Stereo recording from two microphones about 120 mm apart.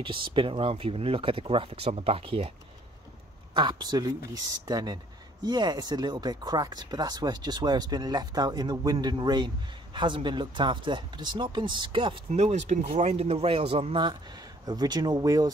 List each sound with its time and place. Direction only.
0.0 s speech: 45° right (ahead or behind)
3.5 s speech: 40° right (ahead or behind)
12.3 s speech: 75° right (ahead or behind); by 13.9 s 55° right (ahead or behind)
14.7 s speech: 35° right (ahead or behind)